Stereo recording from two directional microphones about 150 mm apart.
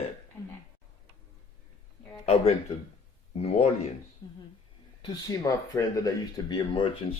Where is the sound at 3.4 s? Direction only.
45° left (ahead or behind).